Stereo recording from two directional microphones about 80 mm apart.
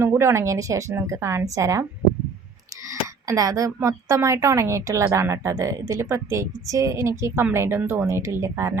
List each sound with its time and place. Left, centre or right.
0.0 s speech: right
2.9 s speech: right